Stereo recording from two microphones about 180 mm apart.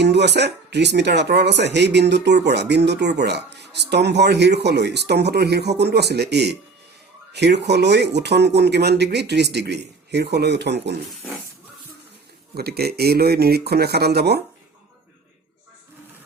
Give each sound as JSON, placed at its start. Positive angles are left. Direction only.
{"t": 0.0, "sound": "speech", "side_deg": -70}
{"t": 12.5, "sound": "speech", "side_deg": -60}